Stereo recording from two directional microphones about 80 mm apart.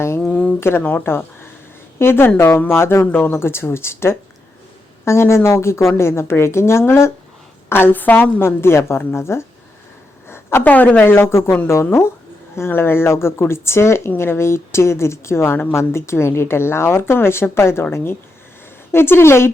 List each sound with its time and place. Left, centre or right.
0.6 s a woman's voice: left